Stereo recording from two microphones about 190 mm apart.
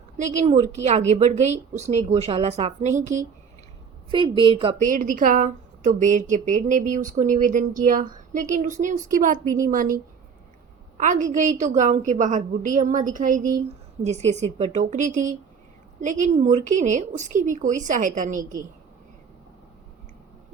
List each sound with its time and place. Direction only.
0.2 s a woman's voice: 35° right (ahead or behind)
4.1 s a woman's voice: 25° right (ahead or behind)
4.8 s a woman's voice: 45° right (ahead or behind)
10.9 s a woman's voice: 40° right (ahead or behind)